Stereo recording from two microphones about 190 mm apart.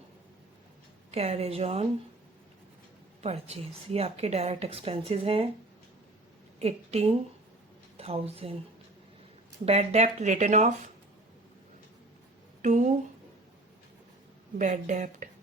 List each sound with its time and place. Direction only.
1.1 s a woman's voice: 35° right (ahead or behind)
3.2 s a woman's voice: 35° right (ahead or behind)
6.6 s a woman's voice: 35° right (ahead or behind)
9.6 s a woman's voice: 35° right (ahead or behind)
12.6 s a woman's voice: 40° right (ahead or behind)
14.6 s a woman's voice: 40° right (ahead or behind)